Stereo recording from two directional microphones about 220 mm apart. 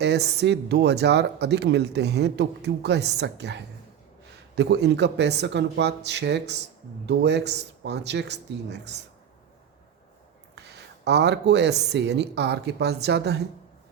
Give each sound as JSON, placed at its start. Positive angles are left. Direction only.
{"t": 0.0, "sound": "speech", "side_deg": -50}
{"t": 11.0, "sound": "speech", "side_deg": -50}